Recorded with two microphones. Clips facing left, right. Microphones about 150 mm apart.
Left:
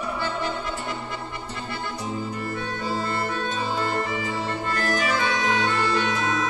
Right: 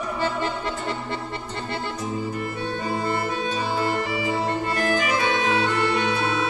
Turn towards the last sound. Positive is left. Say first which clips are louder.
# right 2 dB
turn(degrees=-15)  # may be behind; listen again after turning